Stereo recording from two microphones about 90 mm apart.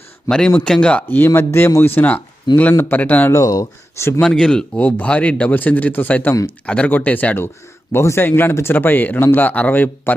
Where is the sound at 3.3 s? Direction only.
40° left (ahead or behind).